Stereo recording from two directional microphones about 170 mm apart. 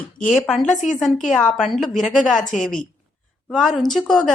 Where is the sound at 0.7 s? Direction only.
45° left (ahead or behind).